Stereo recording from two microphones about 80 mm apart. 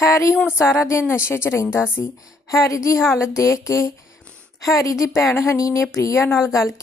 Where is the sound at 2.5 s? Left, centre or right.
Left.